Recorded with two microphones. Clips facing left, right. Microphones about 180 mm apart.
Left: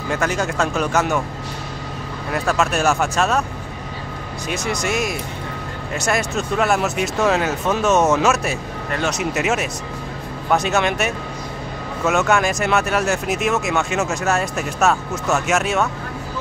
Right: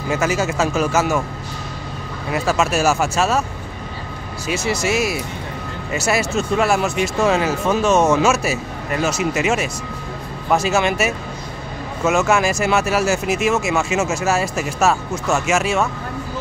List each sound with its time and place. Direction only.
0.1 s speech: 5° right (ahead or behind)
2.3 s speech: centre (ahead or behind)
4.5 s speech: 5° right (ahead or behind)